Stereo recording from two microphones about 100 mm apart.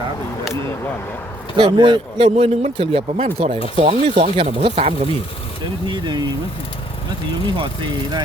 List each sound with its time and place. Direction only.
1.5 s a man's voice: 50° right (ahead or behind)
2.7 s speech: 70° right (ahead or behind); by 5.0 s 85° right
5.9 s a man's voice: 50° right (ahead or behind)
7.4 s a man's voice: 55° right (ahead or behind)